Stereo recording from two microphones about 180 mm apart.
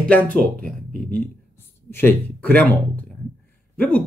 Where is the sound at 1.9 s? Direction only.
10° left (ahead or behind).